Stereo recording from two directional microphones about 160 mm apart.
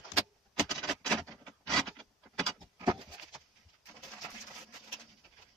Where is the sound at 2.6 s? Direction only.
30° right (ahead or behind).